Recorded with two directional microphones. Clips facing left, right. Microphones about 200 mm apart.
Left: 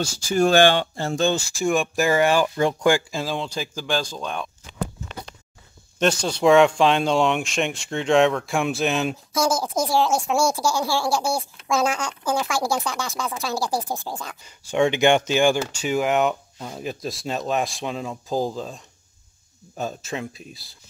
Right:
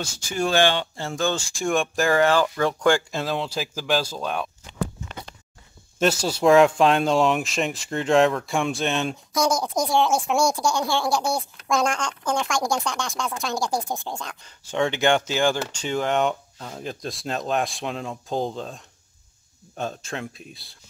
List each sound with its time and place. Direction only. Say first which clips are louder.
0.0 s speech: left 6 dB; 45° left (ahead or behind)
1.3 s speech: left 2 dB; 5° left (ahead or behind)
5.9 s speech: even; 5° right (ahead or behind)
19.8 s speech: left 1 dB; 5° left (ahead or behind)